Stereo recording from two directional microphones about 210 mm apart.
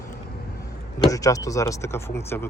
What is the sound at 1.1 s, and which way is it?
Speech, 15° left (ahead or behind).